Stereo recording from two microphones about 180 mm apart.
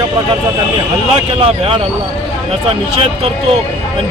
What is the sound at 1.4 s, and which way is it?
Speech, 30° right (ahead or behind).